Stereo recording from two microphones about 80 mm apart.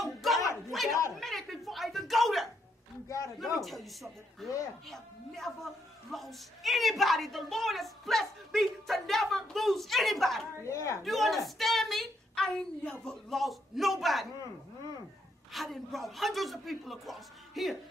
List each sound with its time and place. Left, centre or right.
0.0 s a sound: centre
3.5 s a man's voice: centre
10.6 s a woman's voice: left
11.1 s a sound: centre
12.4 s a woman's voice: centre
15.5 s a man's voice: centre